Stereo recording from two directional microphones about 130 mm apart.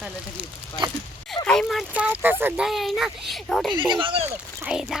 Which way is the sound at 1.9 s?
10° right (ahead or behind).